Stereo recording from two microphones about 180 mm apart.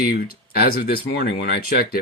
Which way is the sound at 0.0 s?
55° left (ahead or behind).